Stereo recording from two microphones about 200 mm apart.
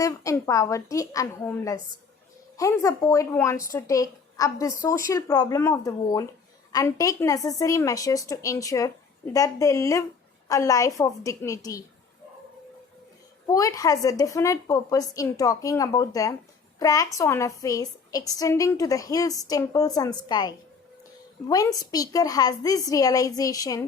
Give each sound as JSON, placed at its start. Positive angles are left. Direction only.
{"t": 0.0, "sound": "a woman's voice", "side_deg": 15}
{"t": 13.5, "sound": "a woman's voice", "side_deg": 15}
{"t": 21.5, "sound": "a woman's voice", "side_deg": 20}